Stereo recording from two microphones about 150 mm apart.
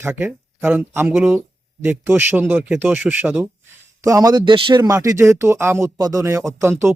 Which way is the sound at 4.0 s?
20° right (ahead or behind).